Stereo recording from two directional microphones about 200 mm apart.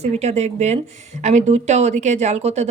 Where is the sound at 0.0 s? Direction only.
35° right (ahead or behind).